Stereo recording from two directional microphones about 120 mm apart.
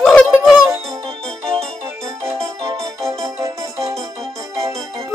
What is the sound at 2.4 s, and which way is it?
Music, 50° right (ahead or behind).